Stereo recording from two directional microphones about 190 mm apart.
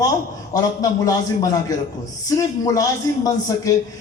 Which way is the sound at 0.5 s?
20° left (ahead or behind).